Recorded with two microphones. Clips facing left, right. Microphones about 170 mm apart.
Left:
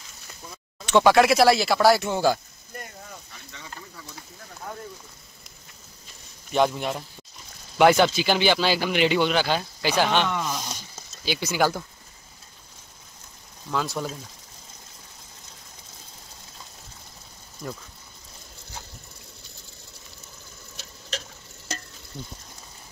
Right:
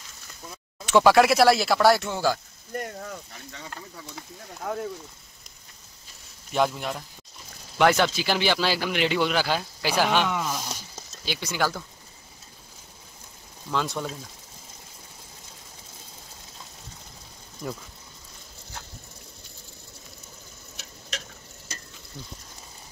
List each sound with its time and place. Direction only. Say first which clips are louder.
0.8 s speech: even; 5° right (ahead or behind)
2.0 s speech: left 3 dB; 20° left (ahead or behind)
2.8 s speech: right 7 dB; 65° right (ahead or behind)
6.5 s speech: left 2 dB; centre (ahead or behind)
13.7 s speech: even; 5° left (ahead or behind)
17.6 s speech: right 1 dB; centre (ahead or behind)